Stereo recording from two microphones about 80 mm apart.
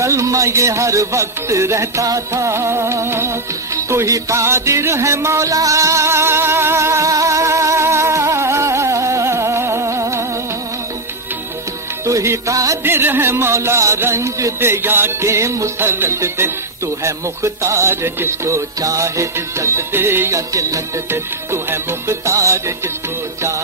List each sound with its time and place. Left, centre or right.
0.0 s music: right
12.1 s music: right
12.8 s music: right
21.1 s music: right